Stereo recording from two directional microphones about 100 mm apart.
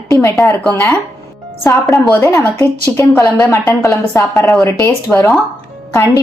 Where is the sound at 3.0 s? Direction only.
30° left (ahead or behind).